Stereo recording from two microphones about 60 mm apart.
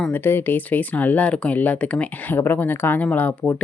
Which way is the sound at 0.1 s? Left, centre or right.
Left.